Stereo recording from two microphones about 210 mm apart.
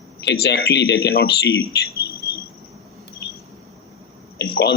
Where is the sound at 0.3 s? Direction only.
50° left (ahead or behind).